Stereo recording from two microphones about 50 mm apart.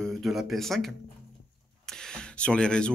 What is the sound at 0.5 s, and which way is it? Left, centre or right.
Speech, centre.